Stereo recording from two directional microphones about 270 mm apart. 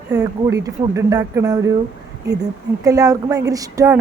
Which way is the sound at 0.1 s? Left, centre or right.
Centre.